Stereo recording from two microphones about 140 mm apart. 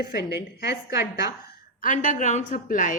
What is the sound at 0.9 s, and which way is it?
Speech, 25° right (ahead or behind).